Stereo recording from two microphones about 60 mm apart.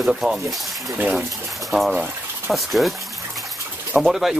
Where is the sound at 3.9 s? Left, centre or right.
Centre.